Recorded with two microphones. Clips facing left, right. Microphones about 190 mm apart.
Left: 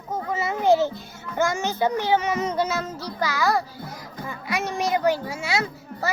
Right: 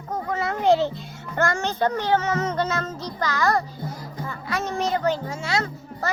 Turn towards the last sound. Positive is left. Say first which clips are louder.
# left 1 dB
turn(degrees=10)  # may be behind; listen again after turning